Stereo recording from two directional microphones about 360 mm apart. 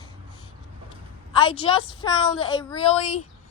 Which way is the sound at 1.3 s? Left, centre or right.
Centre.